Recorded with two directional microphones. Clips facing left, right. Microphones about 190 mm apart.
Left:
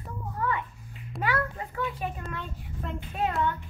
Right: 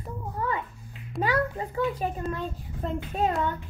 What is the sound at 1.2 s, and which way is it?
A child's voice, 35° right (ahead or behind).